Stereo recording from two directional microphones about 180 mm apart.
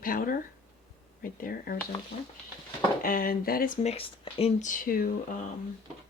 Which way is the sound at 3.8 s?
35° left (ahead or behind).